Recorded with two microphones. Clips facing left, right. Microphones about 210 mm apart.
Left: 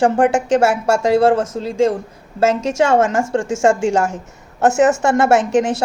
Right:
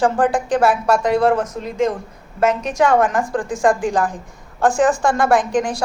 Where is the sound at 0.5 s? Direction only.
25° left (ahead or behind).